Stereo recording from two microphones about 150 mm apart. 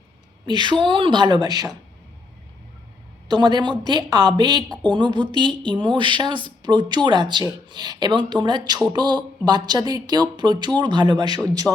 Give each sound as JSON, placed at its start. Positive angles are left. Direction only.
{"t": 0.4, "sound": "speech", "side_deg": -30}
{"t": 3.2, "sound": "speech", "side_deg": -30}